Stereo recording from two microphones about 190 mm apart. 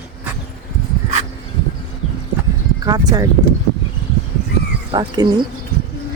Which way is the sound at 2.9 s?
20° right (ahead or behind).